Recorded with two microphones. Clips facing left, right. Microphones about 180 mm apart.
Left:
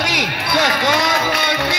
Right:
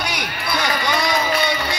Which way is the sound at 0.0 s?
85° left.